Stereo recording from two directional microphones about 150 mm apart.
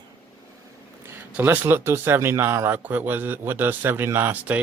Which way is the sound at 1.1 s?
15° right (ahead or behind).